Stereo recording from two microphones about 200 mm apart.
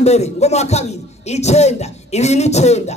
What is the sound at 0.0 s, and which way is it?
Speech, 35° left (ahead or behind).